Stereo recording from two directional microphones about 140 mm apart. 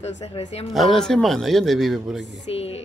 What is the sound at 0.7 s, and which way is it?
A man's voice, centre (ahead or behind).